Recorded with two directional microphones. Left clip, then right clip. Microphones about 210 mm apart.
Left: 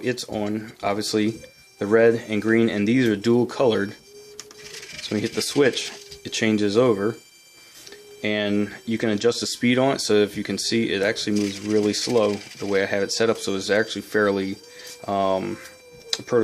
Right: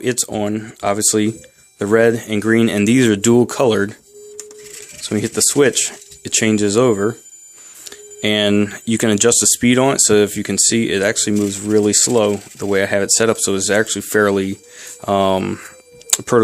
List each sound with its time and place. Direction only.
0.0 s speech: 35° right (ahead or behind)
5.0 s speech: 30° right (ahead or behind)
7.9 s speech: 40° right (ahead or behind)